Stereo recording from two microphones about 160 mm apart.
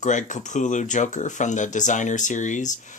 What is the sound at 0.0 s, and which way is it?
Speech, 50° left (ahead or behind).